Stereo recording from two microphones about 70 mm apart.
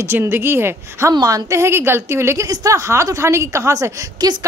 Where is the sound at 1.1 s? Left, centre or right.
Right.